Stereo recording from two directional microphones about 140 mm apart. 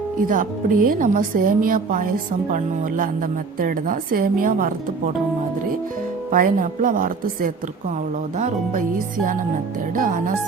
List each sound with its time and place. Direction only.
0.3 s a woman's voice: 75° right (ahead or behind)
3.6 s a woman's voice: 90° right
6.3 s a woman's voice: 75° right (ahead or behind)
9.9 s a woman's voice: 75° right (ahead or behind)